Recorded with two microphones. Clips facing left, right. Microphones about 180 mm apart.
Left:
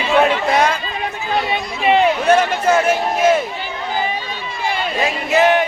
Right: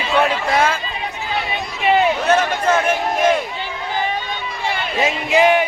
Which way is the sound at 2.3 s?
10° left (ahead or behind).